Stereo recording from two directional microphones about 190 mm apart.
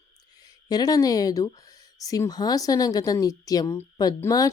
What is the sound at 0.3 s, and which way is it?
Speech, 20° left (ahead or behind).